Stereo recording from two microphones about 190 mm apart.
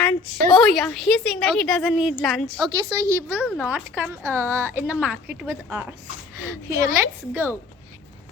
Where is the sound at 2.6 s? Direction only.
15° right (ahead or behind).